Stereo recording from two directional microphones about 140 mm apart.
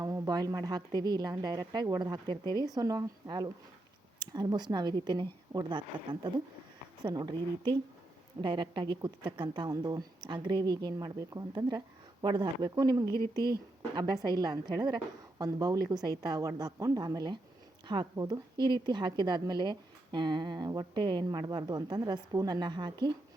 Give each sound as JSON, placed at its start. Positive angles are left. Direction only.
{"t": 0.0, "sound": "a woman's voice", "side_deg": -25}
{"t": 13.1, "sound": "speech", "side_deg": 20}
{"t": 13.9, "sound": "a woman's voice", "side_deg": -30}